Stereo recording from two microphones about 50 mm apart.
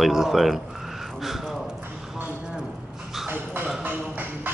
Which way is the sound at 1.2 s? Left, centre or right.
Centre.